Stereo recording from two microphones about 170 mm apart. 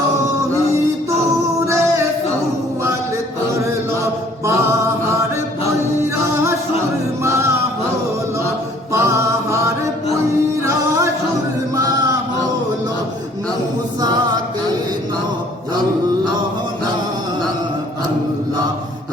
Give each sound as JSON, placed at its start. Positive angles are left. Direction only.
{"t": 8.9, "sound": "music", "side_deg": -15}
{"t": 11.8, "sound": "male singing", "side_deg": -20}